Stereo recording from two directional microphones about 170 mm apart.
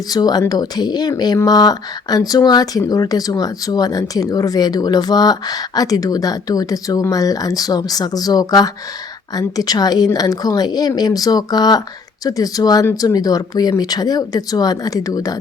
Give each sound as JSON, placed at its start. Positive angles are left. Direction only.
{"t": 0.1, "sound": "speech", "side_deg": 25}